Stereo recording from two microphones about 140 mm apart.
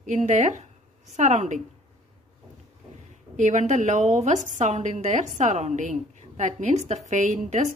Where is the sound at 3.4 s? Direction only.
60° right (ahead or behind).